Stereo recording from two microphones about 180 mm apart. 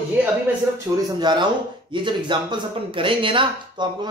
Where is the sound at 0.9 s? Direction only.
15° right (ahead or behind).